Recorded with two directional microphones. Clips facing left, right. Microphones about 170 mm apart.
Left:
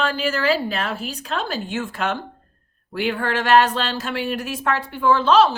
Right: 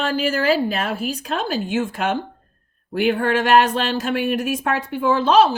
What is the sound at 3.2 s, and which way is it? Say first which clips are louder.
Speech: left 1 dB; 15° right (ahead or behind).